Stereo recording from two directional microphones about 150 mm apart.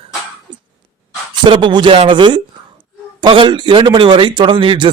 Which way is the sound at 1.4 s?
30° right (ahead or behind).